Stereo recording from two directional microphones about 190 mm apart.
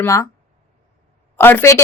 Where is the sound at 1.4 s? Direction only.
10° left (ahead or behind).